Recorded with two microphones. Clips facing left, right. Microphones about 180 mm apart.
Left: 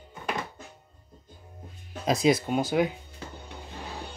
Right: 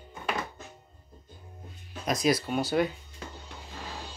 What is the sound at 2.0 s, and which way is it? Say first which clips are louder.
Speech: left 3 dB; 25° left (ahead or behind).